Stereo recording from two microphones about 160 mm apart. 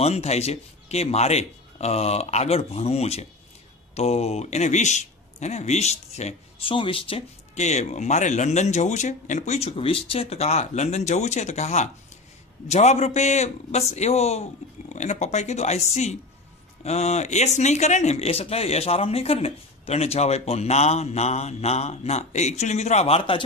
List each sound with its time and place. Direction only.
0.0 s speech: 40° left (ahead or behind)